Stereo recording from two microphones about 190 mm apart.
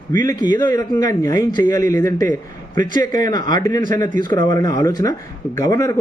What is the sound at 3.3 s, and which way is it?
Speech, 20° left (ahead or behind).